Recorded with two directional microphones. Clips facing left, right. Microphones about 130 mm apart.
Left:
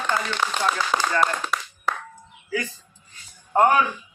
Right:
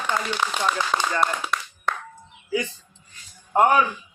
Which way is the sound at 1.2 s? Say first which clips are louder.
Left 1 dB; centre (ahead or behind).